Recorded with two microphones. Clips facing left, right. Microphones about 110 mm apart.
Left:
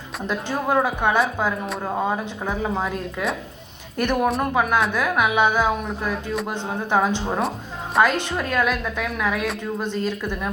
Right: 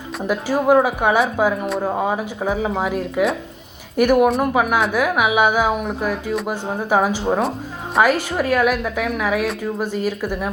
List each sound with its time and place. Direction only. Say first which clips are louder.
0.2 s a woman's voice: right 5 dB; 5° right (ahead or behind)